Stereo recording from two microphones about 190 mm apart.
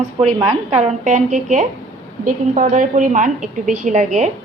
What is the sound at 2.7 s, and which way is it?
A woman's voice, 45° right (ahead or behind).